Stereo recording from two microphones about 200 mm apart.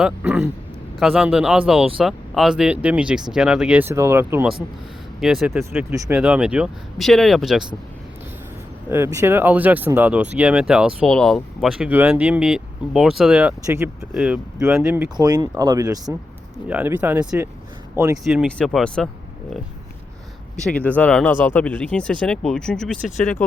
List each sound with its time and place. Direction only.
0.0 s speech: 5° right (ahead or behind)
5.7 s speech: 15° right (ahead or behind)
8.9 s speech: 10° right (ahead or behind)
15.1 s speech: 20° right (ahead or behind)
18.4 s speech: 5° left (ahead or behind)
20.7 s speech: 5° left (ahead or behind)